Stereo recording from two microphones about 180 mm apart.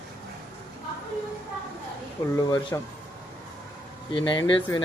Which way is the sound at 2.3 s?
20° left (ahead or behind).